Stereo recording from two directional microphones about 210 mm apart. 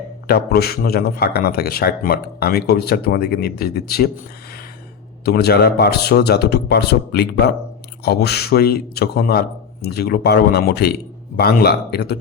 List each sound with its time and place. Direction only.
0.3 s a man's voice: 45° left (ahead or behind)
5.2 s a man's voice: 50° left (ahead or behind)